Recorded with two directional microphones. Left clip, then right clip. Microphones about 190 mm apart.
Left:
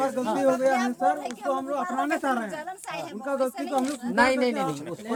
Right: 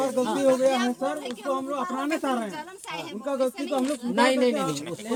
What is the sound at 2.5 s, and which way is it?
Speech, 15° left (ahead or behind).